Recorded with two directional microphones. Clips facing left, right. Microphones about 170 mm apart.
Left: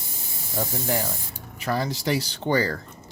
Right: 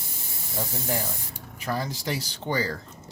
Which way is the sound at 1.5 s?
75° left (ahead or behind).